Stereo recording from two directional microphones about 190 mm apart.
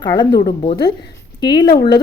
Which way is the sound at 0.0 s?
25° left (ahead or behind).